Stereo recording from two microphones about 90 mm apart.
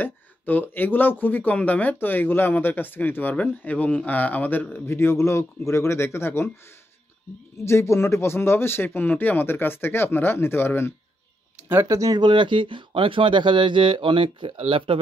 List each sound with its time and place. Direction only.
0.0 s speech: 20° left (ahead or behind)
11.5 s speech: 25° right (ahead or behind)
12.2 s speech: 65° right (ahead or behind); by 15.0 s 85° right